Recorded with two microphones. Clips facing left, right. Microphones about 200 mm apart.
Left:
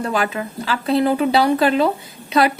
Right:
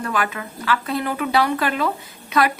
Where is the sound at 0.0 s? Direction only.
30° left (ahead or behind).